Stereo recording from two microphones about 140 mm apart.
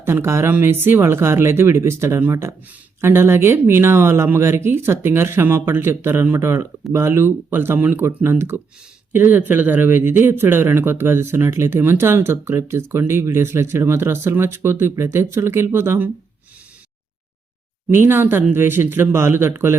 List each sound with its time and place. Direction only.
0.0 s speech: 20° right (ahead or behind)
17.9 s speech: 15° right (ahead or behind)